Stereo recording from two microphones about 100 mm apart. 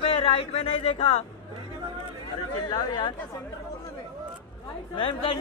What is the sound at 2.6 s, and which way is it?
Speech, 50° left (ahead or behind).